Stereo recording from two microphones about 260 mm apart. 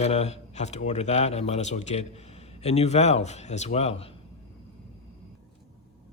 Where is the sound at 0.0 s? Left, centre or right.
Left.